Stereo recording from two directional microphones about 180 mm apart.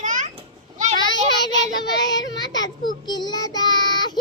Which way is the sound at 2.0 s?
20° left (ahead or behind).